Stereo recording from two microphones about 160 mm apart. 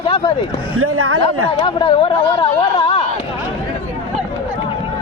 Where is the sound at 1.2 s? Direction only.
35° left (ahead or behind).